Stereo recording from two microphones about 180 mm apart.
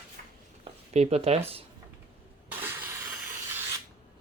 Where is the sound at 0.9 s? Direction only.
35° right (ahead or behind).